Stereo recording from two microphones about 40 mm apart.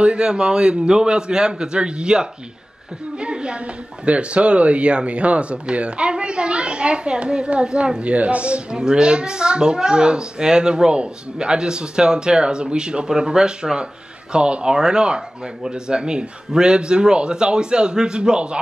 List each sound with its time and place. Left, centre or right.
0.0 s speech: right